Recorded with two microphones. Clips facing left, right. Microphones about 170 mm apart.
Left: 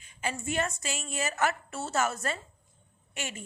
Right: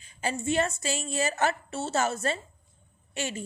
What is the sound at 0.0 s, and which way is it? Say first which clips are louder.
A woman's voice: right 4 dB; 35° right (ahead or behind).